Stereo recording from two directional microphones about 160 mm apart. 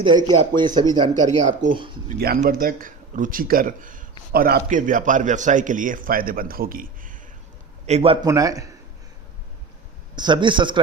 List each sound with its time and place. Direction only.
0.0 s speech: 25° right (ahead or behind)
2.1 s a man's voice: 65° right (ahead or behind)
4.3 s a man's voice: 70° right (ahead or behind)
7.9 s a man's voice: 40° right (ahead or behind)
8.3 s speech: 20° right (ahead or behind)
10.2 s speech: 30° right (ahead or behind)